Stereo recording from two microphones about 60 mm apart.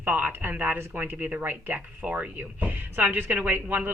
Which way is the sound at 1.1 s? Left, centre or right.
Right.